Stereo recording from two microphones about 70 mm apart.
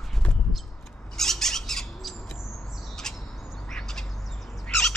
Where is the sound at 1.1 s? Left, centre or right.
Centre.